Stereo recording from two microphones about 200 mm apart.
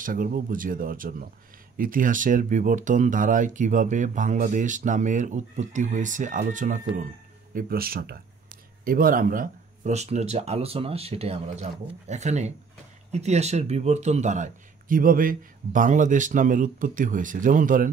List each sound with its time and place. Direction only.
0.0 s speech: 45° right (ahead or behind)